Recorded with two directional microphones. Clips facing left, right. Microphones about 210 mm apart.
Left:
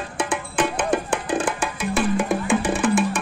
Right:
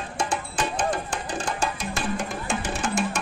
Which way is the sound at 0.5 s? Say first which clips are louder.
Left 7 dB; 55° left (ahead or behind).